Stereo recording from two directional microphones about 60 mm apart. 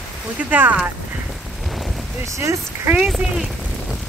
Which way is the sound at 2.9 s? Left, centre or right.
Centre.